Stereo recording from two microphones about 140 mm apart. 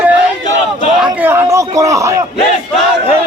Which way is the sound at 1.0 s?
15° right (ahead or behind).